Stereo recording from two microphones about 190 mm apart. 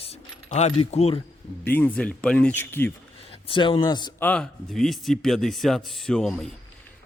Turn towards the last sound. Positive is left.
turn(degrees=5)  # may be behind; listen again after turning